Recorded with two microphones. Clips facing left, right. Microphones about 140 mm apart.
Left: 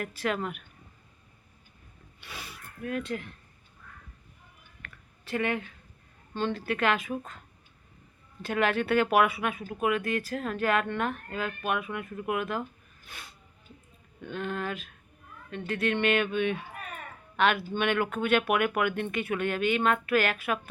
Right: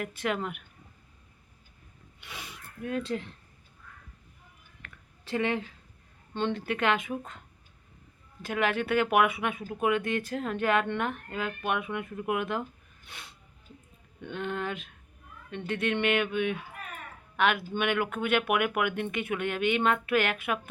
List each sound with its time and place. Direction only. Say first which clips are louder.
0.0 s speech: even; 15° right (ahead or behind)
2.2 s speech: even; 15° right (ahead or behind)
5.2 s speech: right 1 dB; 25° right (ahead or behind)
8.4 s speech: left 2 dB; 15° right (ahead or behind)